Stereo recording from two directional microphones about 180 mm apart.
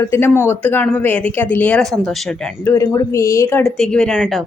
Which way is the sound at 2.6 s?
15° left (ahead or behind).